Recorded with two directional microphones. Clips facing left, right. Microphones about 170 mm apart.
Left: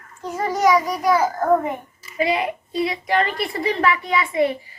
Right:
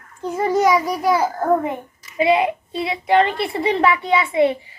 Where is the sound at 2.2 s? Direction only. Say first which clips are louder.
Right 5 dB; 25° right (ahead or behind).